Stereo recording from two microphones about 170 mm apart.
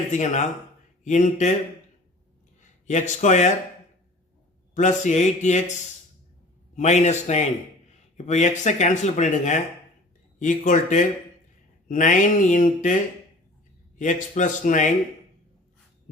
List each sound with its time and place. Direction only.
0.1 s speech: 45° left (ahead or behind)
2.6 s speech: 45° left (ahead or behind)
4.7 s speech: 45° left (ahead or behind)
6.7 s speech: 45° left (ahead or behind)
14.0 s speech: 50° left (ahead or behind)